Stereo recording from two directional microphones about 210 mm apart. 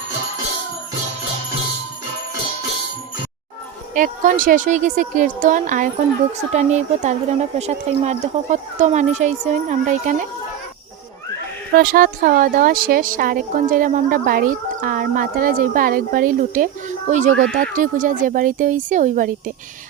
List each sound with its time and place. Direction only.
3.9 s a woman's voice: 40° right (ahead or behind)
11.8 s a woman's voice: 45° right (ahead or behind)